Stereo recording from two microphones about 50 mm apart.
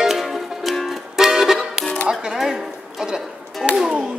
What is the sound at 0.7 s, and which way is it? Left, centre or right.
Music, centre.